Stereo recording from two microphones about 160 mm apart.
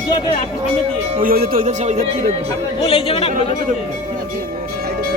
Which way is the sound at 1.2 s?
65° right (ahead or behind).